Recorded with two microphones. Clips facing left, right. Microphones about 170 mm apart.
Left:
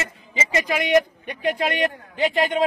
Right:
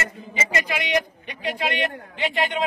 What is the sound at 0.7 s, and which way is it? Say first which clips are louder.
Speech: left 6 dB; 45° left (ahead or behind).